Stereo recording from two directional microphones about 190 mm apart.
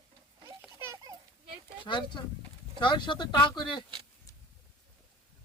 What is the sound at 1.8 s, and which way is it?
Speech, 25° left (ahead or behind).